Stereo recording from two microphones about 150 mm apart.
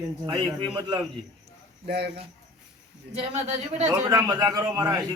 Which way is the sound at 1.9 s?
90° right.